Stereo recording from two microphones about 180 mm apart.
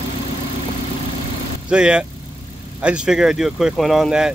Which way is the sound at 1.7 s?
5° right (ahead or behind).